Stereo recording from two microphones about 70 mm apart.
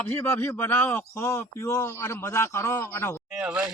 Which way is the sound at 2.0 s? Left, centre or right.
Left.